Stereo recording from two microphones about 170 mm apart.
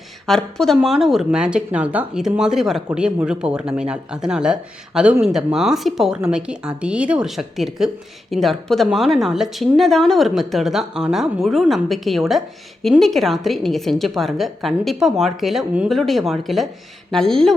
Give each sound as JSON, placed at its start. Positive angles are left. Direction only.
{"t": 0.3, "sound": "speech", "side_deg": 5}